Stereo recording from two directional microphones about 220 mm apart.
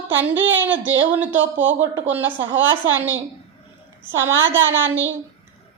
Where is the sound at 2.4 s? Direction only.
60° right (ahead or behind).